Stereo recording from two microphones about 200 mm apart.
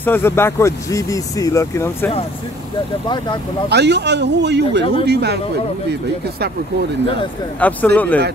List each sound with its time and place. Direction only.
0.0 s speech: 10° left (ahead or behind)
3.6 s speech: 55° right (ahead or behind)
7.6 s speech: 10° left (ahead or behind)